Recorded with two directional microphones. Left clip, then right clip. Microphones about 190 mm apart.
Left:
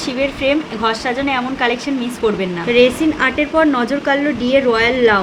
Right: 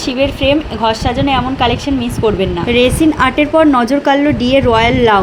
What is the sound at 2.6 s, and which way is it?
Speech, 25° right (ahead or behind).